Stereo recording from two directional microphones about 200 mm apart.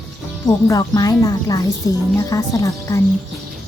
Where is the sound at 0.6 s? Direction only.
15° left (ahead or behind).